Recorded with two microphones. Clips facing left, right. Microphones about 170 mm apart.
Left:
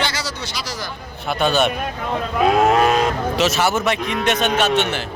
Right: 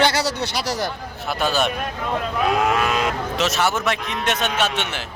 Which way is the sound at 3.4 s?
Centre (ahead or behind).